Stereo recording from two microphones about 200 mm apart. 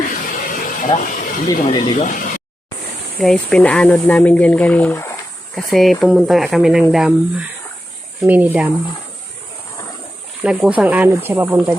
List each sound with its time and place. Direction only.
0.0 s a sound: 40° left (ahead or behind)
1.7 s speech: 30° left (ahead or behind)
3.2 s speech: 5° left (ahead or behind)
10.4 s speech: 5° right (ahead or behind)